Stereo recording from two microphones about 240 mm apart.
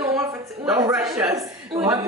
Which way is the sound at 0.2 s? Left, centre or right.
Centre.